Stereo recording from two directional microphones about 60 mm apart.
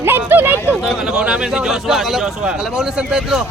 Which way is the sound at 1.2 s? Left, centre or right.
Centre.